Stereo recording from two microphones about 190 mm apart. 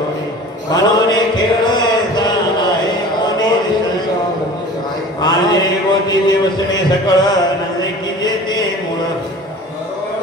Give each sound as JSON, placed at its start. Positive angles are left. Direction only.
{"t": 0.7, "sound": "chant", "side_deg": 20}
{"t": 5.2, "sound": "a man's voice", "side_deg": 20}